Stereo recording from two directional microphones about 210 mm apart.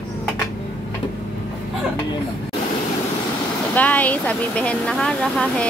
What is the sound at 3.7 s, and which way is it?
Speech, 10° left (ahead or behind).